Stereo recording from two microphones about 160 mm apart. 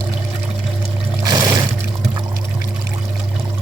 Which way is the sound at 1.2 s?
25° right (ahead or behind).